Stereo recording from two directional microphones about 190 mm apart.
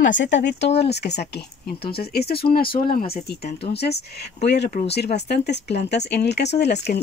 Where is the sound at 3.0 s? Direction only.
30° left (ahead or behind).